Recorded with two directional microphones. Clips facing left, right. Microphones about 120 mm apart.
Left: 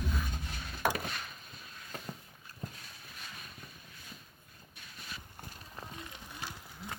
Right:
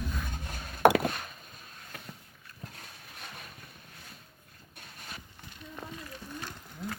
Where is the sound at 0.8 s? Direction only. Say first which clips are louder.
Right 11 dB; 65° right (ahead or behind).